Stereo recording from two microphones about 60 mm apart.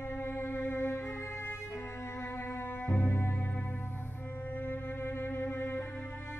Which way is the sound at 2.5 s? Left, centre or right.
Left.